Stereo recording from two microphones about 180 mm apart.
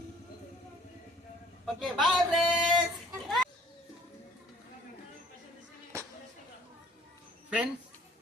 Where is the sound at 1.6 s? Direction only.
Centre (ahead or behind).